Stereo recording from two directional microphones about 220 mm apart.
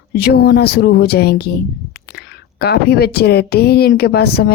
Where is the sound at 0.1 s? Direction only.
45° left (ahead or behind).